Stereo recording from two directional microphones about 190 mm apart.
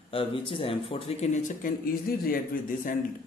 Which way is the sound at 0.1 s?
30° left (ahead or behind).